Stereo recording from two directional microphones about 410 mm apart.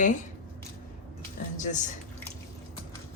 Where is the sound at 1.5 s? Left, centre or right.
Centre.